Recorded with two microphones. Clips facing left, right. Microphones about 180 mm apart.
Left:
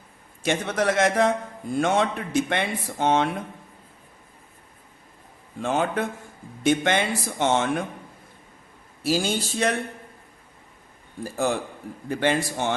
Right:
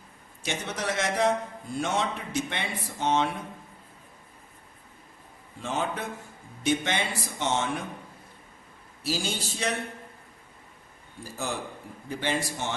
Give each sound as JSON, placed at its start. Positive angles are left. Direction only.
{"t": 0.4, "sound": "a man's voice", "side_deg": 55}
{"t": 5.6, "sound": "a man's voice", "side_deg": 55}
{"t": 9.0, "sound": "speech", "side_deg": 55}
{"t": 11.2, "sound": "speech", "side_deg": 55}